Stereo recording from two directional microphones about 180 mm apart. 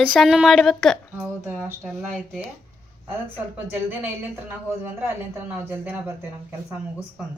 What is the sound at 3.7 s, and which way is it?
A woman's voice, 10° right (ahead or behind).